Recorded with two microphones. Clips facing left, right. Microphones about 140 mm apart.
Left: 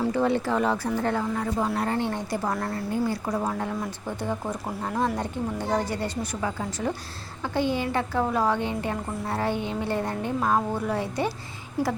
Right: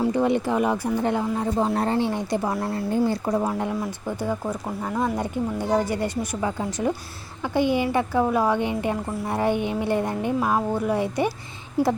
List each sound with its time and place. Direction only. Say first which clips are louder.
0.0 s a woman's voice: right 2 dB; 15° right (ahead or behind)
1.5 s a woman's voice: right 5 dB; 30° right (ahead or behind); by 2.6 s 10° right (ahead or behind)
2.6 s a woman's voice: right 4 dB; 25° right (ahead or behind)
3.3 s a woman's voice: right 4 dB; 15° right (ahead or behind)